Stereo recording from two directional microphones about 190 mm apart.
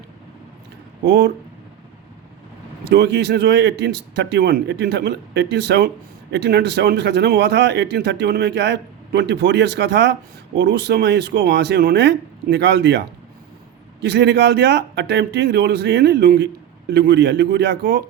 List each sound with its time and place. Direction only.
1.0 s speech: 65° right (ahead or behind)
2.9 s speech: 60° right (ahead or behind)
14.0 s speech: 65° right (ahead or behind)